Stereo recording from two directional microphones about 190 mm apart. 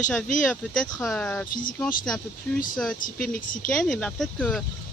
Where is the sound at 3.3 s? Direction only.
45° left (ahead or behind).